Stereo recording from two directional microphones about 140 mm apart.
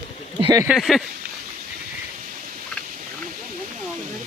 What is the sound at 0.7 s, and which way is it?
Speech, centre (ahead or behind).